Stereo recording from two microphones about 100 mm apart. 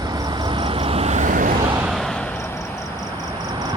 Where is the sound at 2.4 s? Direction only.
25° left (ahead or behind).